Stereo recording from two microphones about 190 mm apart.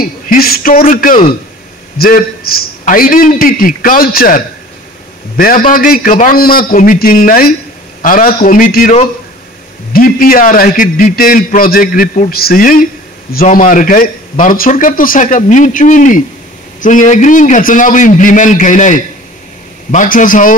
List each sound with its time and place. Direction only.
0.0 s a man's voice: 50° left (ahead or behind)
5.4 s a man's voice: 50° left (ahead or behind)
9.9 s a man's voice: 50° left (ahead or behind)